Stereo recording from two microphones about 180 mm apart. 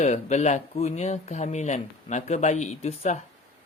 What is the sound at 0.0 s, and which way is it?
Speech, 40° left (ahead or behind).